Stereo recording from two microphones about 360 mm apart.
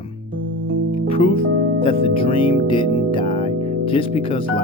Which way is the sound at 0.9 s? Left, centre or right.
Centre.